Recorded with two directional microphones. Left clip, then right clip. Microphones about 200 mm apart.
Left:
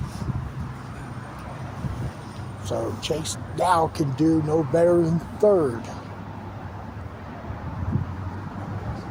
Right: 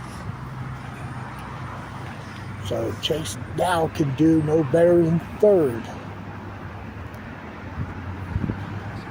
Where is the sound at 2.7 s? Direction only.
10° right (ahead or behind).